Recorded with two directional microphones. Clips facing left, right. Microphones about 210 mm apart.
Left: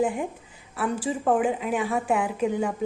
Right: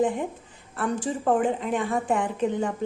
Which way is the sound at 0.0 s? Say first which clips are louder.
Right 1 dB; 10° left (ahead or behind).